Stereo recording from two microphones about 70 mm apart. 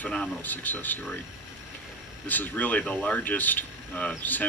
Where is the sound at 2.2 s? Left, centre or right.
Left.